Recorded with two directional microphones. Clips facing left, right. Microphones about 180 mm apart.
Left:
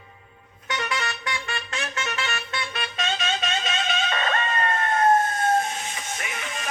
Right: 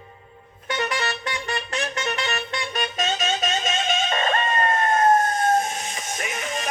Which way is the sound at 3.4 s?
45° right (ahead or behind).